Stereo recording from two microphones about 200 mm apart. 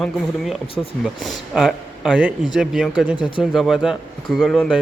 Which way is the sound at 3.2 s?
25° left (ahead or behind).